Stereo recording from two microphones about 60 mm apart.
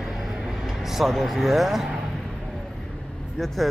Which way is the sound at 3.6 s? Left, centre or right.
Centre.